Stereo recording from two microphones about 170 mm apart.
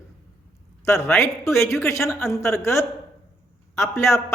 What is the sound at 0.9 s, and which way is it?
A man's voice, 15° left (ahead or behind).